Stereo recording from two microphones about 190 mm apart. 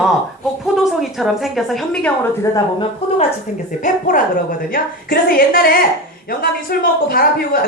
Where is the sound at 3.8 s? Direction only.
45° left (ahead or behind).